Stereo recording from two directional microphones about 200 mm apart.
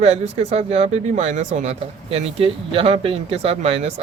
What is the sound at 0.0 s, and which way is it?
Speech, 35° right (ahead or behind).